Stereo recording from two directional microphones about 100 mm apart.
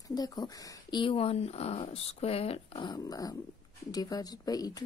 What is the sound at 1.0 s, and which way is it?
Speech, 70° left (ahead or behind).